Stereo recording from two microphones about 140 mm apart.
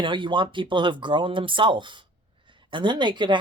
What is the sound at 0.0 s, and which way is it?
Speech, 35° right (ahead or behind).